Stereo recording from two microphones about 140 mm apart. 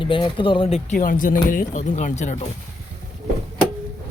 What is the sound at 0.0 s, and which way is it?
Speech, 35° left (ahead or behind).